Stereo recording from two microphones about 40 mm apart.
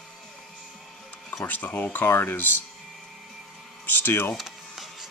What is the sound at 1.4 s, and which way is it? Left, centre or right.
Speech, left.